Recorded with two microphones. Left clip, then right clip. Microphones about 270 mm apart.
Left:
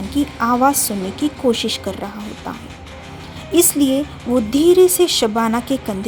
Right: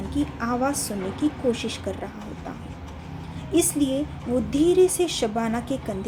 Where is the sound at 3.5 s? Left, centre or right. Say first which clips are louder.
Left 7 dB; left.